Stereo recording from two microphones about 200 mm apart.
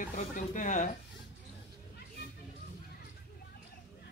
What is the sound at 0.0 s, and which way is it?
Speech, 40° left (ahead or behind).